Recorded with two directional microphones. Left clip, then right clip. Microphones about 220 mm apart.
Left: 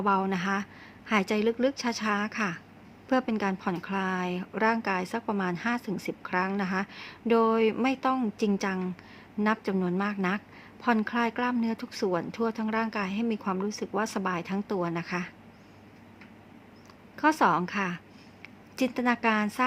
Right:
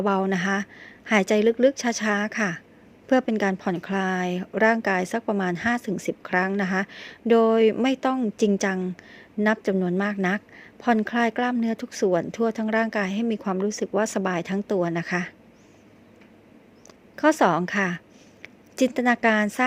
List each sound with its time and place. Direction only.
0.0 s speech: 25° right (ahead or behind)
17.2 s a woman's voice: 25° right (ahead or behind)